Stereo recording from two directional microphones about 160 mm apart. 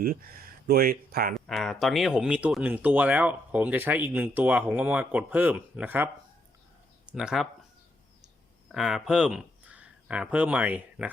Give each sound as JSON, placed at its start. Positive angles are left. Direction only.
{"t": 0.0, "sound": "speech", "side_deg": -65}
{"t": 1.3, "sound": "speech", "side_deg": 0}
{"t": 7.1, "sound": "speech", "side_deg": -5}
{"t": 8.7, "sound": "speech", "side_deg": -5}